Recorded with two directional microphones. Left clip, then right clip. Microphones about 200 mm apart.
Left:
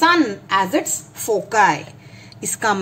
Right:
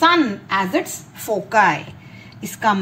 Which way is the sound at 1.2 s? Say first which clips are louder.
Even; 25° left (ahead or behind).